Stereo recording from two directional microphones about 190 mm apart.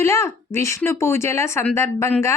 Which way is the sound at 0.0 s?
15° left (ahead or behind).